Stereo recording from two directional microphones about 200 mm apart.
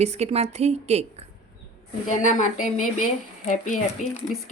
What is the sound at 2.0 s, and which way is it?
A woman's voice, 35° left (ahead or behind).